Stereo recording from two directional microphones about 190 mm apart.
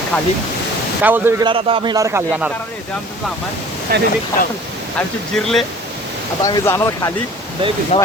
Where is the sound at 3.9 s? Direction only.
50° right (ahead or behind).